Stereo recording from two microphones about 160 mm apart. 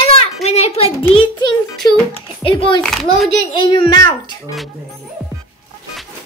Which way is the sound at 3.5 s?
30° left (ahead or behind).